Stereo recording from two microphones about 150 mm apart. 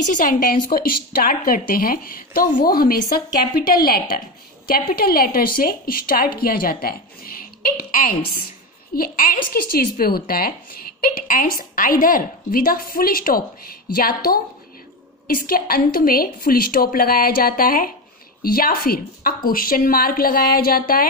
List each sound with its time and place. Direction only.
0.1 s speech: 60° left (ahead or behind)
0.7 s a woman's voice: 75° left (ahead or behind)
9.5 s speech: 85° left